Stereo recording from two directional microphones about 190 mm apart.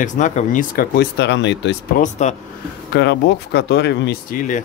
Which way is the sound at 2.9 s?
65° left (ahead or behind).